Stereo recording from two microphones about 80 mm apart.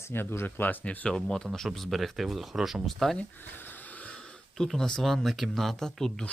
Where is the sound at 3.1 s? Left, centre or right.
Left.